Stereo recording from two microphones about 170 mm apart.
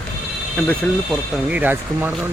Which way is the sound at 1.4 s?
10° right (ahead or behind).